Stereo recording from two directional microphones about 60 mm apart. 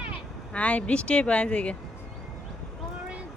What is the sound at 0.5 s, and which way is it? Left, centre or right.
Speech, left.